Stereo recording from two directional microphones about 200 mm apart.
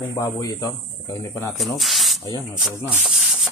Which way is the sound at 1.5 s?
Centre (ahead or behind).